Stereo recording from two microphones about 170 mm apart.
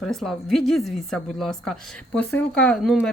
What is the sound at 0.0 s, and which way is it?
Speech, centre (ahead or behind).